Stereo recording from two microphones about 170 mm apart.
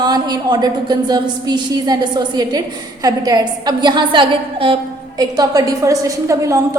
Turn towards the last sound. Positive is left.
turn(degrees=-20)  # may be behind; listen again after turning